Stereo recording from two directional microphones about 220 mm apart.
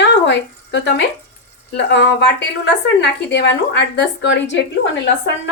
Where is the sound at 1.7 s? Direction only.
50° left (ahead or behind).